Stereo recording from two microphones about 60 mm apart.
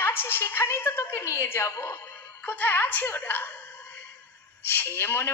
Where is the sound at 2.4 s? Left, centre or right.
Left.